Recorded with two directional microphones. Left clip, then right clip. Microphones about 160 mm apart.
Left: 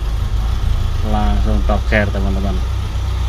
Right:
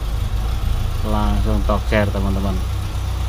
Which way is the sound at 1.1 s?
20° right (ahead or behind).